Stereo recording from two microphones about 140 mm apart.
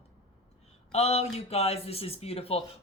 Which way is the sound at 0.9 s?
50° left (ahead or behind).